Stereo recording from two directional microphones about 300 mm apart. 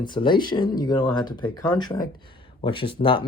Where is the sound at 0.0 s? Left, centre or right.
Centre.